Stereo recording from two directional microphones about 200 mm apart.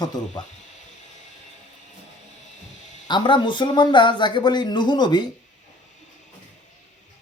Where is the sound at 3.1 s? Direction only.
25° left (ahead or behind).